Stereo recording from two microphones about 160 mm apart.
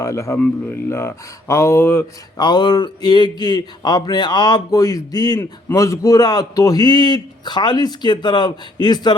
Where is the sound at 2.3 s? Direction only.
25° left (ahead or behind).